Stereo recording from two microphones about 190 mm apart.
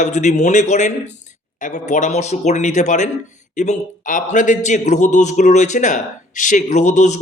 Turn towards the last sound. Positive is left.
turn(degrees=40)  # may be behind; listen again after turning